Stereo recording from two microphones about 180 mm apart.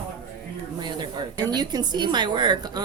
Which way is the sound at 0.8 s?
25° right (ahead or behind).